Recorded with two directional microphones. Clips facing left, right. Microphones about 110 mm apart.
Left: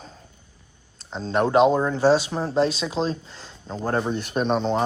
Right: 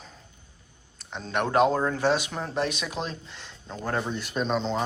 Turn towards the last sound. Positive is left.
turn(degrees=50)  # may be behind; listen again after turning